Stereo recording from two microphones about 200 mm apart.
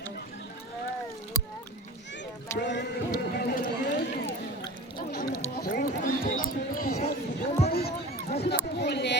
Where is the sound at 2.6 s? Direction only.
60° left (ahead or behind).